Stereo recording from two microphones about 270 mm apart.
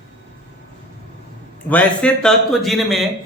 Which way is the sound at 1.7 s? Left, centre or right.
Centre.